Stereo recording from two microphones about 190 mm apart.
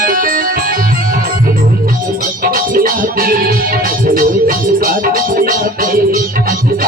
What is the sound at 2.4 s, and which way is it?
Music, 50° right (ahead or behind).